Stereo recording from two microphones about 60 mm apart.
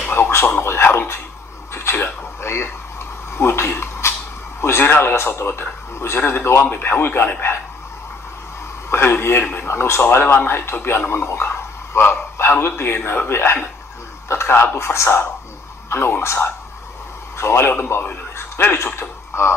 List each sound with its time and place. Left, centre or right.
0.1 s a sound: left
3.3 s a man's voice: left
8.9 s a man's voice: left